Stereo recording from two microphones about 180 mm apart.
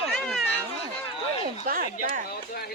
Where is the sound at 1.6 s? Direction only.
50° right (ahead or behind).